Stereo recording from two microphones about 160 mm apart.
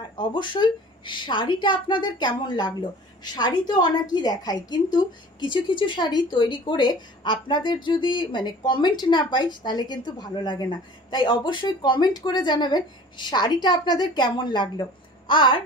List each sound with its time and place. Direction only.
0.2 s speech: 30° left (ahead or behind)